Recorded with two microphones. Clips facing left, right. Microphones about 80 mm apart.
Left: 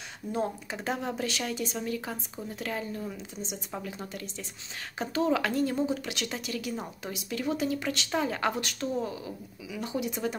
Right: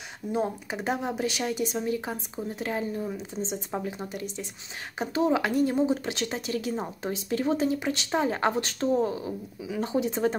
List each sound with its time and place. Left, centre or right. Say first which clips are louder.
0.3 s a woman's voice: right 3 dB; centre